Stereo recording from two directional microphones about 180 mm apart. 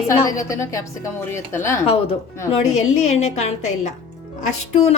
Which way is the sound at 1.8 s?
35° left (ahead or behind).